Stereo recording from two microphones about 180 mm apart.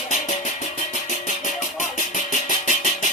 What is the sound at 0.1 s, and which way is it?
Music, 40° left (ahead or behind).